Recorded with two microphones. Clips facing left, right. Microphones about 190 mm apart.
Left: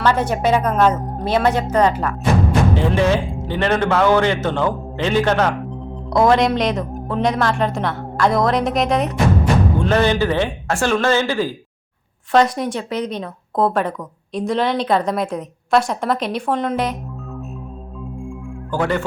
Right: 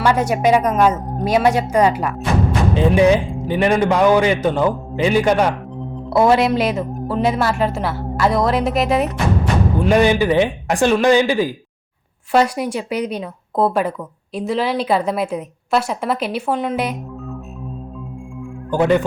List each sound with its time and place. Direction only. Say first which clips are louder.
0.0 s a man's voice: right 2 dB; 10° right (ahead or behind)
18.7 s speech: right 5 dB; 20° right (ahead or behind)